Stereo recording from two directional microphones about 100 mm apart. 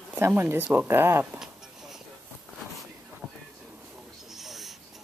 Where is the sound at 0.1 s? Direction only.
20° right (ahead or behind).